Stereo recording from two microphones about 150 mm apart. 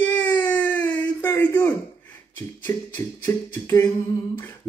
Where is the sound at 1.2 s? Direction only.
15° left (ahead or behind).